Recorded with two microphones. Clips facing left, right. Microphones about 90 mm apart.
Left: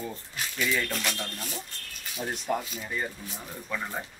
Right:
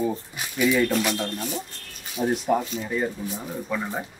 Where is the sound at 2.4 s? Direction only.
Centre (ahead or behind).